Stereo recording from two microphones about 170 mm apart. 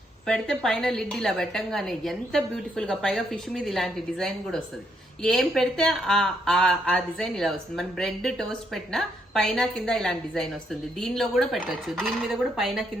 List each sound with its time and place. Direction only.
0.3 s speech: 5° left (ahead or behind)